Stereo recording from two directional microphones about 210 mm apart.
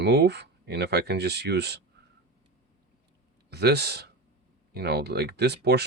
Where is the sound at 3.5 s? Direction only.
50° right (ahead or behind).